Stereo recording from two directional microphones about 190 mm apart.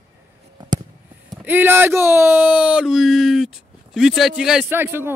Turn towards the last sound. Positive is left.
turn(degrees=-10)  # may be behind; listen again after turning